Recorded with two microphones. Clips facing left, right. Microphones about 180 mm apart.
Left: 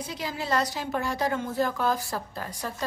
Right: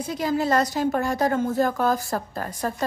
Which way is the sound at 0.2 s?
45° right (ahead or behind).